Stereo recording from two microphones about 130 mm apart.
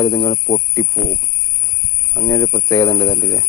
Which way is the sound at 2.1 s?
30° left (ahead or behind).